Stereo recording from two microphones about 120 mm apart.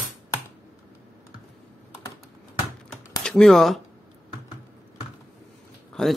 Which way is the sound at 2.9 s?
5° left (ahead or behind).